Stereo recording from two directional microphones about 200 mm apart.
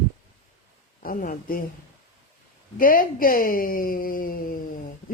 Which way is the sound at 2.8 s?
45° left (ahead or behind).